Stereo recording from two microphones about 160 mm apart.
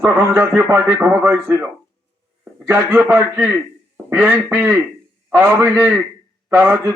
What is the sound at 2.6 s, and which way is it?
A man's voice, 10° right (ahead or behind).